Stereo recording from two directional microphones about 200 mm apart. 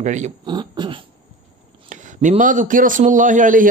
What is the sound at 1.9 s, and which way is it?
A man's voice, 40° right (ahead or behind).